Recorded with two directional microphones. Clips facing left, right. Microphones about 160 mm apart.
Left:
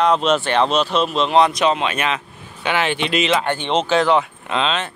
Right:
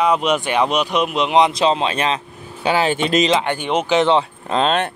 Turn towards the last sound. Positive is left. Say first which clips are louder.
# right 4 dB
turn(degrees=-50)  # may be behind; listen again after turning